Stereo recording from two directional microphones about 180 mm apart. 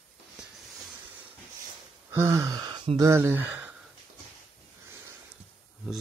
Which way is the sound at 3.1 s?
15° right (ahead or behind).